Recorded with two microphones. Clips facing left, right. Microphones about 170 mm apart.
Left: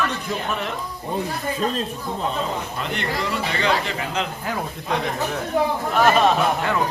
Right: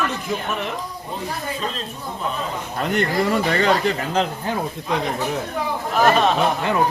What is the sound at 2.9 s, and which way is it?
Speech, 45° right (ahead or behind).